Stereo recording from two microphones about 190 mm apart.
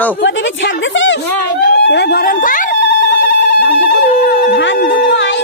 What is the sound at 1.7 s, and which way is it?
Speech, 60° left (ahead or behind).